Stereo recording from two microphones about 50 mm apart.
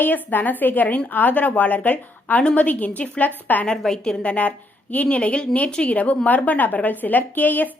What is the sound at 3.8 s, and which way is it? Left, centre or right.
Speech, centre.